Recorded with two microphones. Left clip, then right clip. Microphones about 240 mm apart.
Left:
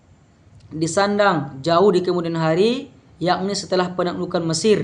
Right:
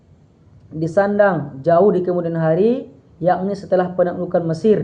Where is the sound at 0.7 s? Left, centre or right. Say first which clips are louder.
Right 3 dB; left.